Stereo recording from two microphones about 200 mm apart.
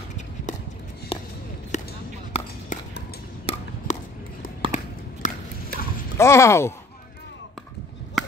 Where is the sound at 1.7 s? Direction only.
35° left (ahead or behind).